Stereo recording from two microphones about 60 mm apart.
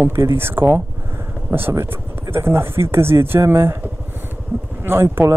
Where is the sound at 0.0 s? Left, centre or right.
Right.